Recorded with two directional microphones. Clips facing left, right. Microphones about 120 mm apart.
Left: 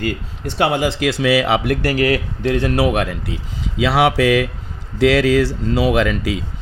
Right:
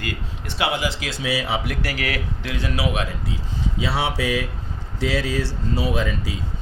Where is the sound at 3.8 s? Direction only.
90° left.